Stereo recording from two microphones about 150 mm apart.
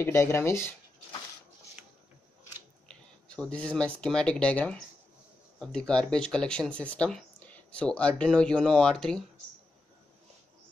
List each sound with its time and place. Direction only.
0.0 s speech: 15° left (ahead or behind)
3.3 s speech: 10° left (ahead or behind)